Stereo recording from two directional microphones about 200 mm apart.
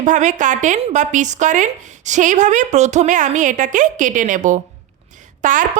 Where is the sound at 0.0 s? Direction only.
35° right (ahead or behind).